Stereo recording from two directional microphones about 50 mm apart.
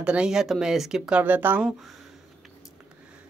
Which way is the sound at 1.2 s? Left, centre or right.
Right.